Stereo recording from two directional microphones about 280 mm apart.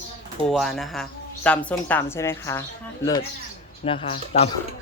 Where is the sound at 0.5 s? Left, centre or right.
Centre.